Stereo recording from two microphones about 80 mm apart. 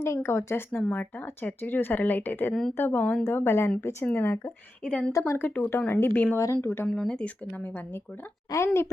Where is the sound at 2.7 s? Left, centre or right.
Left.